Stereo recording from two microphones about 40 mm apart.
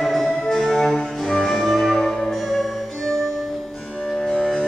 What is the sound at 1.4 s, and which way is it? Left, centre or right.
Music, centre.